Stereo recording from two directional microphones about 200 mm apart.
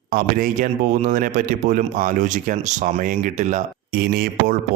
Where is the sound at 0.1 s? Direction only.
45° right (ahead or behind).